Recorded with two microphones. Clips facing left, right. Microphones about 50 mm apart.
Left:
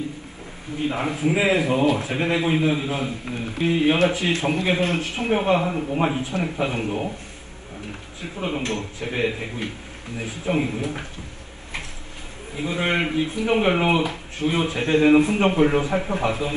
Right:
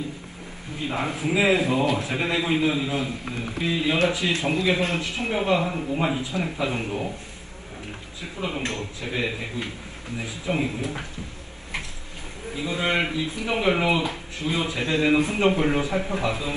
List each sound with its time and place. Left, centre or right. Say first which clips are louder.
0.7 s speech: left 3 dB; left
5.7 s a man's voice: left 2 dB; centre
6.0 s speech: left 2 dB; left
8.2 s speech: left 2 dB; left
12.5 s speech: left 1 dB; left